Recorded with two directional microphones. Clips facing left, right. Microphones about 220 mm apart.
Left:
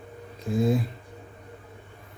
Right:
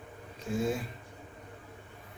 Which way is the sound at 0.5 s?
35° left (ahead or behind).